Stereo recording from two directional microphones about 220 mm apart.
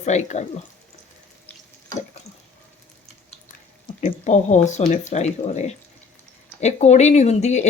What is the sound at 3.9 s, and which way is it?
Speech, 30° left (ahead or behind).